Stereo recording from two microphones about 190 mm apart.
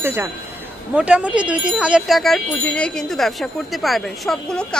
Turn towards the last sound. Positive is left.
turn(degrees=0)  # may be behind; listen again after turning